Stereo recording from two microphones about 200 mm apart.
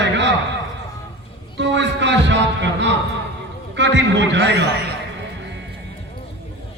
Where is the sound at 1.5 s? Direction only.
60° right (ahead or behind).